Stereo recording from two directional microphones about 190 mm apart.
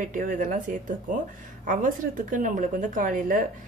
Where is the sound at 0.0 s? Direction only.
45° right (ahead or behind).